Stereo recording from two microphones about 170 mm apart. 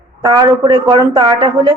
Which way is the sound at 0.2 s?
25° right (ahead or behind).